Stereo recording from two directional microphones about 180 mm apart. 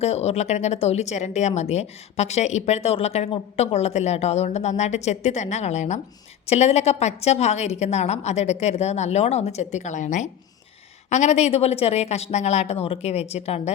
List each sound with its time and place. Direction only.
0.0 s speech: 35° left (ahead or behind)